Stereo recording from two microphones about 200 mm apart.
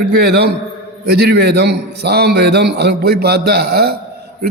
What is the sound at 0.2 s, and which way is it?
A man's voice, 55° right (ahead or behind).